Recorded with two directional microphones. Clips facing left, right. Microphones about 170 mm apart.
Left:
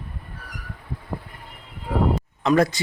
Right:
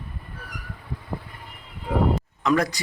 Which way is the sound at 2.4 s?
30° left (ahead or behind).